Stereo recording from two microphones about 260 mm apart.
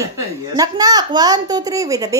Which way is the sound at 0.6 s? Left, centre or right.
Centre.